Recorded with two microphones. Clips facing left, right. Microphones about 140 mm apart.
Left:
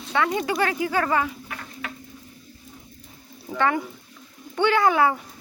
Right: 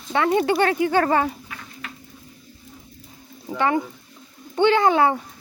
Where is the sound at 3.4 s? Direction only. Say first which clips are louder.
Right 2 dB; 20° right (ahead or behind).